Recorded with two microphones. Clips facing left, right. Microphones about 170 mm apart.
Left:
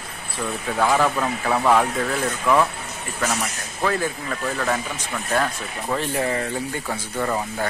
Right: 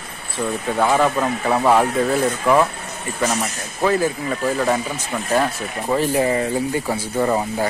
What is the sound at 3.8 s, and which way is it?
Speech, 10° right (ahead or behind).